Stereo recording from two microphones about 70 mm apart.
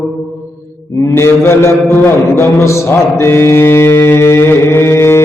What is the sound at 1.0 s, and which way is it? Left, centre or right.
A man's voice, left.